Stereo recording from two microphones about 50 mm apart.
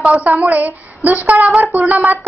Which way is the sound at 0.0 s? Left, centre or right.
Right.